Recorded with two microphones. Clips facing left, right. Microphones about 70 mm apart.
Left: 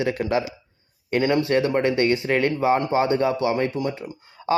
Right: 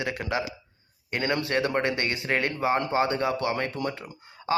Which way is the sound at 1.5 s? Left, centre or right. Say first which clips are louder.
Left 5 dB; right.